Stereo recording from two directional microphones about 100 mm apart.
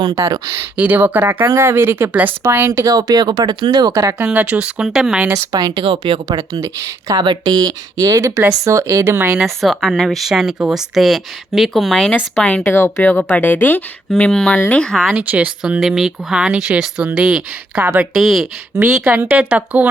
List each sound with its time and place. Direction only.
0.0 s speech: 40° right (ahead or behind)
0.8 s speech: 15° right (ahead or behind)
2.8 s speech: 40° right (ahead or behind)
4.3 s speech: 15° right (ahead or behind)
5.3 s speech: 40° right (ahead or behind); by 6.3 s 55° right (ahead or behind)
6.3 s speech: 35° right (ahead or behind)
7.2 s speech: 45° right (ahead or behind); by 9.4 s 30° right (ahead or behind)
9.4 s speech: centre (ahead or behind)
12.6 s speech: 25° left (ahead or behind)
14.3 s speech: 5° left (ahead or behind)
15.1 s speech: 15° right (ahead or behind)
19.0 s speech: 15° right (ahead or behind)